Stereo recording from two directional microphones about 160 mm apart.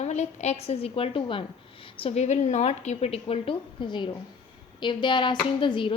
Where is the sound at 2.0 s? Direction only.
45° left (ahead or behind).